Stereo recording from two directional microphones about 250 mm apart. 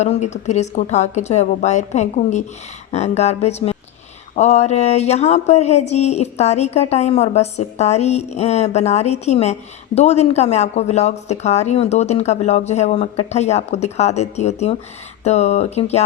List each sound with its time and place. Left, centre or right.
0.0 s a woman's voice: left